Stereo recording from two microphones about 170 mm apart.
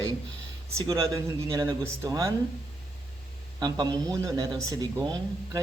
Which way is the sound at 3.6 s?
25° right (ahead or behind).